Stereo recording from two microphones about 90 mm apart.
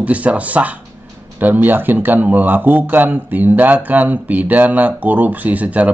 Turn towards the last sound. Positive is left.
turn(degrees=-15)  # may be behind; listen again after turning